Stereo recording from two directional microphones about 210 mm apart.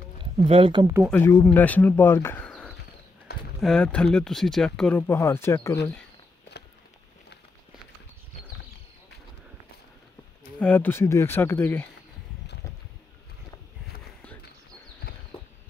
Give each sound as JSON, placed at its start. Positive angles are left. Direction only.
{"t": 0.2, "sound": "speech", "side_deg": -25}
{"t": 1.1, "sound": "speech", "side_deg": 10}
{"t": 10.6, "sound": "speech", "side_deg": 10}